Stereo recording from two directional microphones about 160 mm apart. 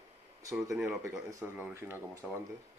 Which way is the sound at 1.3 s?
15° right (ahead or behind).